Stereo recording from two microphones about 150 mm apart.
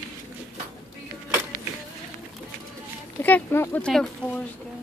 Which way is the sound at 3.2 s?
15° left (ahead or behind).